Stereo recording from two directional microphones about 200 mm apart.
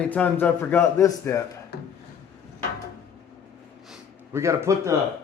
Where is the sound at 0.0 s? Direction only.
5° left (ahead or behind).